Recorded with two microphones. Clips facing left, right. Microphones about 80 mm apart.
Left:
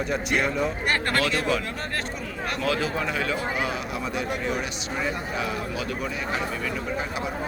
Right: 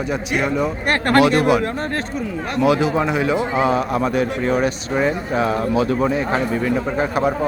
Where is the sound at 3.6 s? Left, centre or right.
Right.